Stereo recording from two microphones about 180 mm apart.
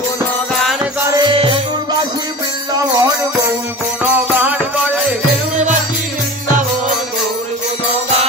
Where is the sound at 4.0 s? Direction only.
10° right (ahead or behind).